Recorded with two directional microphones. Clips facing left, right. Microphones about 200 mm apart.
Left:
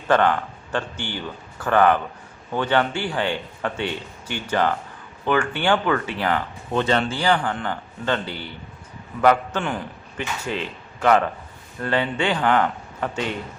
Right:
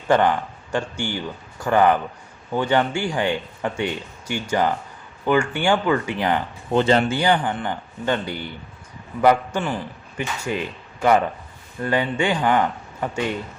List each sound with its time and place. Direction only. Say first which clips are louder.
0.1 s speech: right 1 dB; 10° right (ahead or behind)
6.7 s a man's voice: right 4 dB; 30° right (ahead or behind); by 13.2 s 10° right (ahead or behind)